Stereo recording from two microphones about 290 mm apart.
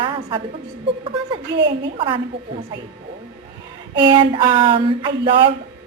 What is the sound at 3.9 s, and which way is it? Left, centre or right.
A woman's voice, centre.